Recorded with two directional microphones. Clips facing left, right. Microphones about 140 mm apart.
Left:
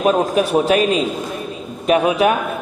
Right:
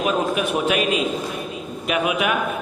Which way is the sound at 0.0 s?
35° left (ahead or behind).